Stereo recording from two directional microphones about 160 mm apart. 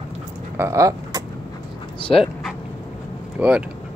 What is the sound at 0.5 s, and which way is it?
Speech, 20° right (ahead or behind).